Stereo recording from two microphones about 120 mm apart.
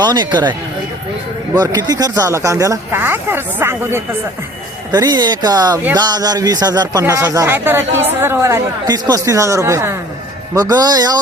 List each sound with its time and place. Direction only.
0.0 s speech: 35° right (ahead or behind)
1.5 s speech: 35° right (ahead or behind)
4.9 s speech: 35° right (ahead or behind)
8.9 s speech: 30° right (ahead or behind)